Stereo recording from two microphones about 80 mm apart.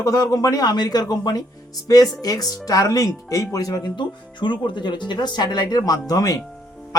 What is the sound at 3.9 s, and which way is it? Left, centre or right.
Speech, left.